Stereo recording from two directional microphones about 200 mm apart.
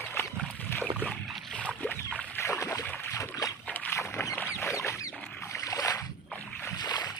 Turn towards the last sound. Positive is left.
turn(degrees=20)  # may be behind; listen again after turning